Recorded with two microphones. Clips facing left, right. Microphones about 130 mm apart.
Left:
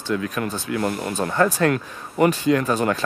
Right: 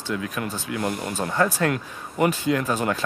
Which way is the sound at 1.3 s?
10° right (ahead or behind).